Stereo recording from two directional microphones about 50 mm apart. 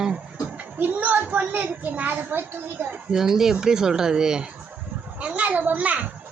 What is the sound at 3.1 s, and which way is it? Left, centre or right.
Speech, centre.